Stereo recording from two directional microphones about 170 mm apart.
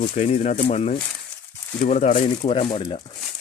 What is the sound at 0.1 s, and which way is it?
Speech, 45° left (ahead or behind).